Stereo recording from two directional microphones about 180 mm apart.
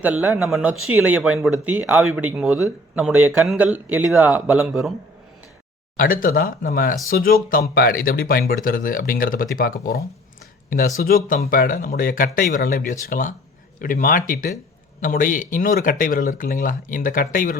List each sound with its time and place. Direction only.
0.0 s speech: 10° right (ahead or behind)
6.0 s speech: 50° left (ahead or behind)